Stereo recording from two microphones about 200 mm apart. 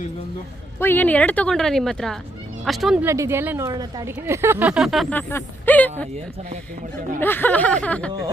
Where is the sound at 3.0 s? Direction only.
15° right (ahead or behind); by 5.9 s 10° left (ahead or behind).